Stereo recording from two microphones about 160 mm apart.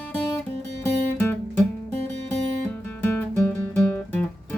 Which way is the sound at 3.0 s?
15° left (ahead or behind).